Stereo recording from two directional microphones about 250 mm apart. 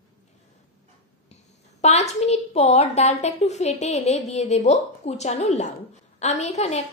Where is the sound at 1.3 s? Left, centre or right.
Left.